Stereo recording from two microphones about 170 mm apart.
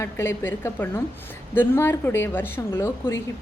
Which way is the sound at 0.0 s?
15° left (ahead or behind).